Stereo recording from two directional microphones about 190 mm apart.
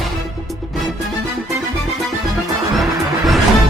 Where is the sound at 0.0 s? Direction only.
Centre (ahead or behind).